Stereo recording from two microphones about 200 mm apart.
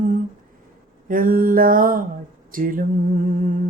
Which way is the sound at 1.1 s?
45° right (ahead or behind).